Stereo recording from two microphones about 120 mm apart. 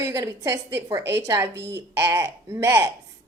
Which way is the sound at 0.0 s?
30° right (ahead or behind).